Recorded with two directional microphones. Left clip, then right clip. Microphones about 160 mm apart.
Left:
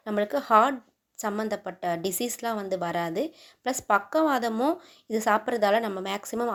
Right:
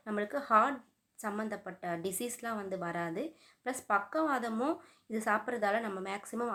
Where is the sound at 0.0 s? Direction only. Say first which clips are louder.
Left 9 dB; 40° left (ahead or behind).